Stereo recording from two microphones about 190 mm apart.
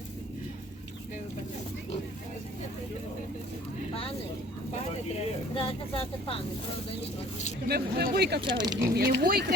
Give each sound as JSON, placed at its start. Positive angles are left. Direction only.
{"t": 5.5, "sound": "speech", "side_deg": 30}
{"t": 7.7, "sound": "speech", "side_deg": -55}
{"t": 8.4, "sound": "speech", "side_deg": -25}
{"t": 9.0, "sound": "speech", "side_deg": -55}